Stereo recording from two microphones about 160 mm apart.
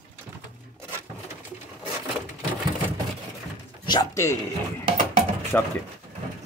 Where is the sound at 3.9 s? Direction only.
20° left (ahead or behind).